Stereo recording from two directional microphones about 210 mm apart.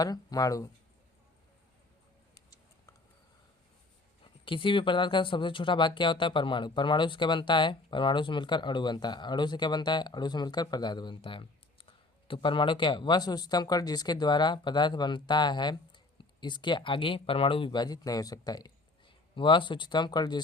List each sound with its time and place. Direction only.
0.0 s speech: 15° left (ahead or behind)
4.2 s speech: 25° left (ahead or behind)